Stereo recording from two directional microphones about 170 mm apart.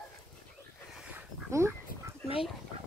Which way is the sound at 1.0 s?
15° right (ahead or behind).